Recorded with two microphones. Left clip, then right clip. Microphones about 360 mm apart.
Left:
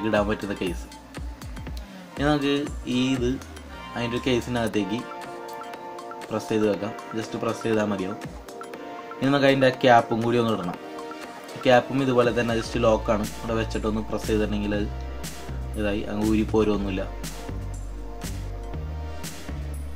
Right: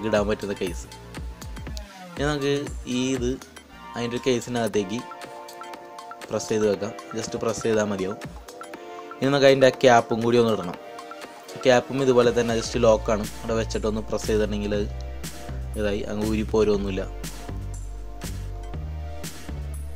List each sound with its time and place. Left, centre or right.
0.0 s speech: right
2.1 s speech: right
5.2 s music: centre
6.3 s speech: right
9.2 s speech: right
11.6 s speech: right